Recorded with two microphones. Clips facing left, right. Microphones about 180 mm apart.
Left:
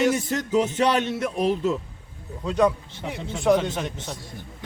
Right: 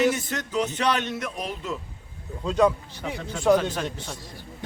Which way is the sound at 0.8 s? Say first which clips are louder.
Left 4 dB; 40° left (ahead or behind).